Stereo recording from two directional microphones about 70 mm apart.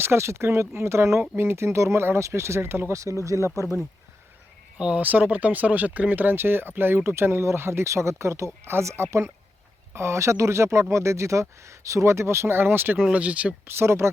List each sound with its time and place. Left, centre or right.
0.0 s speech: right
2.9 s speech: right
4.8 s speech: centre
13.1 s speech: centre
13.7 s speech: right